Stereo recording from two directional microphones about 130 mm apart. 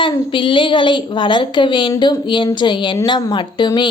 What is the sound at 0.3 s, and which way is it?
A woman's voice, 40° left (ahead or behind).